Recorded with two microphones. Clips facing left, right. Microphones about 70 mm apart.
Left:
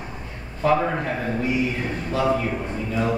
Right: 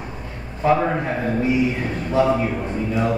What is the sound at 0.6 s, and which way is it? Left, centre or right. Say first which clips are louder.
Speech: right 2 dB; centre.